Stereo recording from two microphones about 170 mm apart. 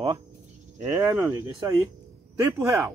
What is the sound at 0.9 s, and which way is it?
Speech, 15° right (ahead or behind).